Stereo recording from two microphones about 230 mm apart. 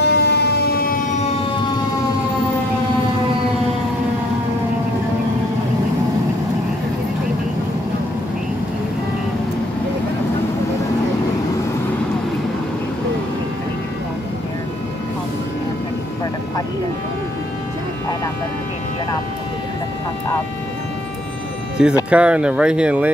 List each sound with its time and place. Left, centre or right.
0.0 s emergency vehicle: left
21.8 s speech: centre